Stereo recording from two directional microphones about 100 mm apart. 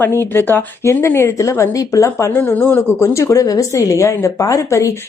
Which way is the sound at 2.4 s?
20° left (ahead or behind).